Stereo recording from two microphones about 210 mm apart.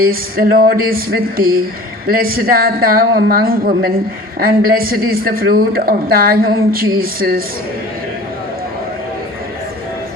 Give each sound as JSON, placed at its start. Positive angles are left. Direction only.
{"t": 0.0, "sound": "speech", "side_deg": -45}